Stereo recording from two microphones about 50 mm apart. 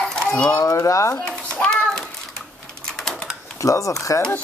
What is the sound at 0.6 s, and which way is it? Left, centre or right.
Speech, left.